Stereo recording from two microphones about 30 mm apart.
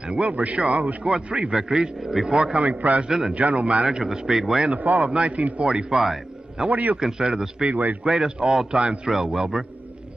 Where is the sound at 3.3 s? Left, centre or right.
Right.